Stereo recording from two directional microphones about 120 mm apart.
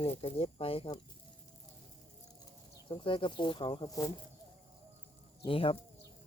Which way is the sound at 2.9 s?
45° left (ahead or behind).